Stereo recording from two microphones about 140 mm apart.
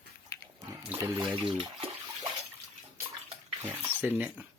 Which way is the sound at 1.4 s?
40° right (ahead or behind).